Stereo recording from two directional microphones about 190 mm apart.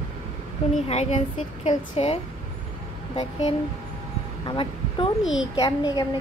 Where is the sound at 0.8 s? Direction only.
35° left (ahead or behind).